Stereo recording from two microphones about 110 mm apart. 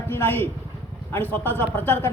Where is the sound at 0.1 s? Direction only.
20° left (ahead or behind).